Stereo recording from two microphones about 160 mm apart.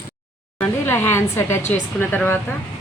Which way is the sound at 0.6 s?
15° left (ahead or behind).